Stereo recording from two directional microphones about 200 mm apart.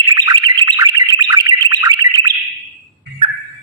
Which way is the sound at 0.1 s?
20° right (ahead or behind).